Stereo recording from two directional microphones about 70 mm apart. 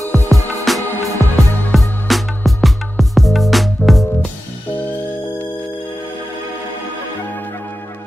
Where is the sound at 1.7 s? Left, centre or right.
Centre.